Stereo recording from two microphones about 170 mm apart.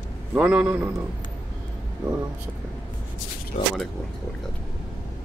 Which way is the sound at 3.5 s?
50° left (ahead or behind).